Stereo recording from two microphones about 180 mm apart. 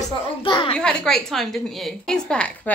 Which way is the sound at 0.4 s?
30° left (ahead or behind).